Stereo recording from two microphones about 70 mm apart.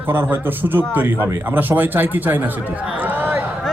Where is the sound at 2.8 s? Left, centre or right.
Right.